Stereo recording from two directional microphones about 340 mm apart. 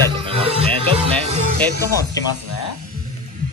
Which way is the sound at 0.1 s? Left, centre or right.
Centre.